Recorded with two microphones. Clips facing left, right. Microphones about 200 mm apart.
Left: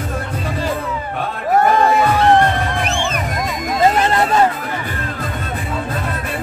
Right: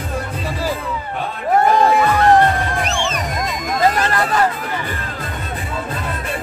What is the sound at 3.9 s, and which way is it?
Hubbub, 25° left (ahead or behind).